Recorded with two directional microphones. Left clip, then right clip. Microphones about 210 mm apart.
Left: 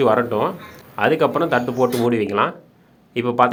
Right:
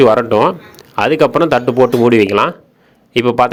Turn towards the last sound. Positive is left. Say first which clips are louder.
# right 5 dB
turn(degrees=-35)  # may be behind; listen again after turning